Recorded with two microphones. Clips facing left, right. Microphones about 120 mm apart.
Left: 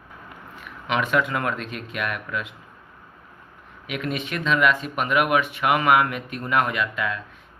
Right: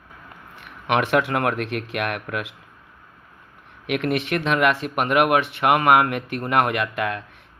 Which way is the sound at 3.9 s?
60° right (ahead or behind).